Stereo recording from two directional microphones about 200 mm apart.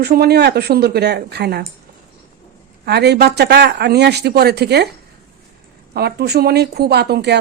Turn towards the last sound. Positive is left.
turn(degrees=-55)  # may be behind; listen again after turning